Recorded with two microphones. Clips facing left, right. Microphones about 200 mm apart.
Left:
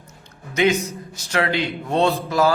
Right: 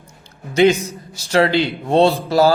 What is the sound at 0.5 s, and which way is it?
A man's voice, 30° right (ahead or behind).